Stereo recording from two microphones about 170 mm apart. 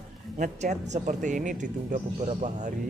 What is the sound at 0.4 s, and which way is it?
Speech, 45° right (ahead or behind).